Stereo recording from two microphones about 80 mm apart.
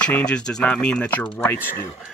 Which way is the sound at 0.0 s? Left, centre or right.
Centre.